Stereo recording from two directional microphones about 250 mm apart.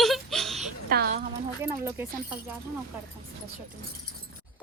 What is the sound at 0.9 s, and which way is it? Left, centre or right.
Speech, right.